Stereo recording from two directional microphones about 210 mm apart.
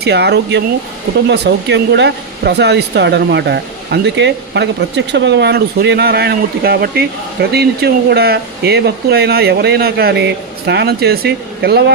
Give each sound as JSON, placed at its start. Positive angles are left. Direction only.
{"t": 0.0, "sound": "speech", "side_deg": -50}